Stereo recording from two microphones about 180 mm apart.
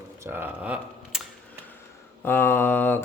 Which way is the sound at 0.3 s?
10° right (ahead or behind).